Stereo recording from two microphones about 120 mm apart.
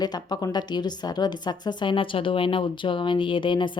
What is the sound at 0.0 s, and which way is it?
A woman's voice, 35° left (ahead or behind).